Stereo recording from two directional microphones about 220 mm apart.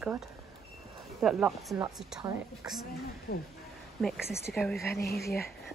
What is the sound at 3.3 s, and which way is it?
Speech, 45° left (ahead or behind).